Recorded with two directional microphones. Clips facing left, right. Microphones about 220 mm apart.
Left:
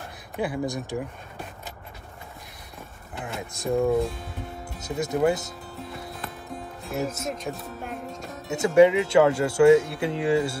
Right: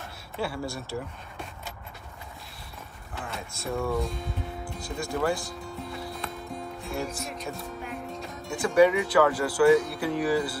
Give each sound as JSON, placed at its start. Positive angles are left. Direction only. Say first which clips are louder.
{"t": 0.4, "sound": "speech", "louder": "left 4 dB", "side_deg": 15}
{"t": 3.2, "sound": "speech", "louder": "left 3 dB", "side_deg": 15}
{"t": 5.9, "sound": "music", "louder": "right 1 dB", "side_deg": 0}
{"t": 8.5, "sound": "speech", "louder": "left 3 dB", "side_deg": 20}